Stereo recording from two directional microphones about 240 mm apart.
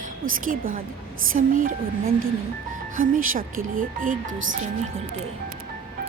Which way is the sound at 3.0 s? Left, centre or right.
Right.